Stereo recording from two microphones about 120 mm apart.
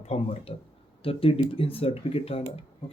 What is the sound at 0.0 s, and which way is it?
Speech, 55° left (ahead or behind).